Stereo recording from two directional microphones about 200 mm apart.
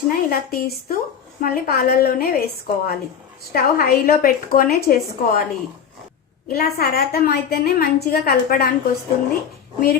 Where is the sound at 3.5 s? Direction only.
50° left (ahead or behind).